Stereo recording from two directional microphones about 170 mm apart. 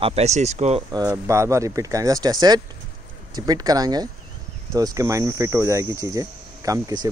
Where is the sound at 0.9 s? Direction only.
20° right (ahead or behind).